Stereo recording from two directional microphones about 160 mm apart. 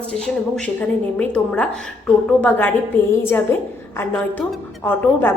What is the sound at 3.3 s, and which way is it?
A woman's voice, 15° left (ahead or behind).